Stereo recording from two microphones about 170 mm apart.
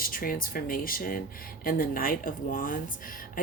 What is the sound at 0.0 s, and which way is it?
A woman's voice, 55° left (ahead or behind).